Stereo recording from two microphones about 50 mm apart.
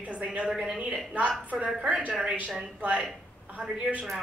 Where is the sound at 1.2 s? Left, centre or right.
Right.